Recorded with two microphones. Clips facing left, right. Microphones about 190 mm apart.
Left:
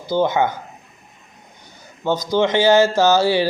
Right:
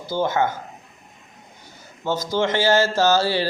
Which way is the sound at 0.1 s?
15° left (ahead or behind).